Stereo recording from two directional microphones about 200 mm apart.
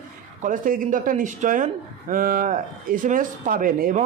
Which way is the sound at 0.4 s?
40° right (ahead or behind).